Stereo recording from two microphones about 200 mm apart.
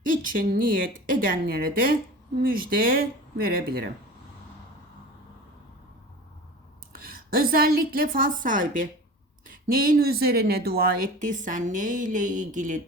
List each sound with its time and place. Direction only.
0.0 s a woman's voice: 45° right (ahead or behind)
7.0 s a woman's voice: 45° right (ahead or behind)